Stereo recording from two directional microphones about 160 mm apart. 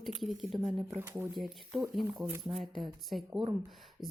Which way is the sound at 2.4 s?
35° right (ahead or behind).